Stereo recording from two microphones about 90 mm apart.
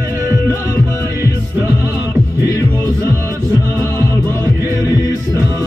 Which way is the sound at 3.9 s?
30° left (ahead or behind).